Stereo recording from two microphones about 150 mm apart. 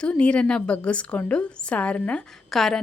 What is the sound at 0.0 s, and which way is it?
Speech, 5° left (ahead or behind).